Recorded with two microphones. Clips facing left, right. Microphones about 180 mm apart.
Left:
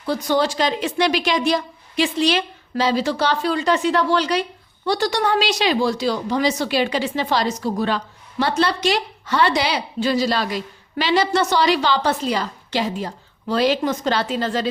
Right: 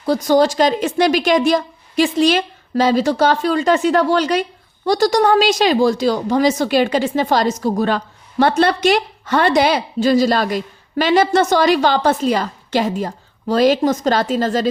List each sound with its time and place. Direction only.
0.0 s a woman's voice: 40° right (ahead or behind)